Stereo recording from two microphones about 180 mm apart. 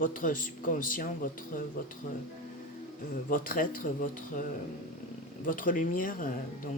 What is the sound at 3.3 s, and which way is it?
A man's voice, 50° left (ahead or behind).